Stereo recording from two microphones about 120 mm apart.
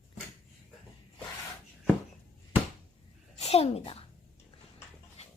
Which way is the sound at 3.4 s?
60° left (ahead or behind).